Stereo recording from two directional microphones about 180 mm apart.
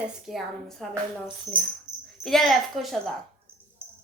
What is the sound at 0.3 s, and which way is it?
Speech, centre (ahead or behind).